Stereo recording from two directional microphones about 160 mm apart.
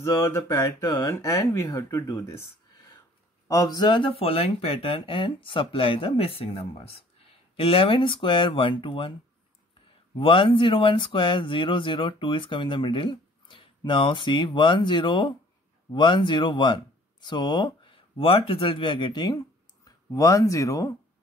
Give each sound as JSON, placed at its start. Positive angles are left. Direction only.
{"t": 0.0, "sound": "speech", "side_deg": 15}
{"t": 3.4, "sound": "speech", "side_deg": 25}
{"t": 10.1, "sound": "speech", "side_deg": 30}